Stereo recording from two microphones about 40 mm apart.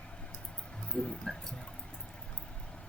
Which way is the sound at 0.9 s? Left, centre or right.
Left.